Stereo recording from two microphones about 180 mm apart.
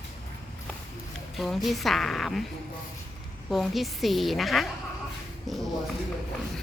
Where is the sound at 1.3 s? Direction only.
Centre (ahead or behind).